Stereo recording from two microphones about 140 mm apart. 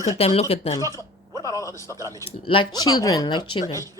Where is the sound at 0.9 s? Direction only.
25° left (ahead or behind).